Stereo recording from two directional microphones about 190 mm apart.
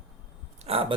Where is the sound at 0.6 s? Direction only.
30° right (ahead or behind).